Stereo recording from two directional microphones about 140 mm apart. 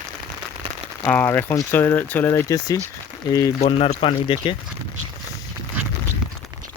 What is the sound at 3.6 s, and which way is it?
Speech, 45° left (ahead or behind).